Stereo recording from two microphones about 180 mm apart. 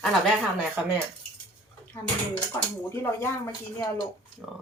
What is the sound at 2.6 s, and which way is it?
Speech, 15° left (ahead or behind).